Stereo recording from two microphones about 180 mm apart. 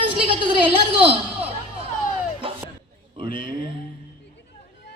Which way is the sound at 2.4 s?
30° right (ahead or behind).